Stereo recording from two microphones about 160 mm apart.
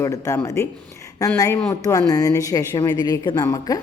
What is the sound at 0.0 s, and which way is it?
A woman's voice, 20° left (ahead or behind).